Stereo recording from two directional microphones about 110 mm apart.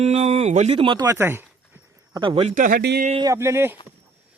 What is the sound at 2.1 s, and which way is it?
Speech, 50° right (ahead or behind).